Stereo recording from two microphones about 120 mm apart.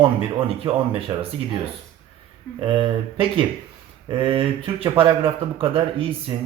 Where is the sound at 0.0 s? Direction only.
50° right (ahead or behind).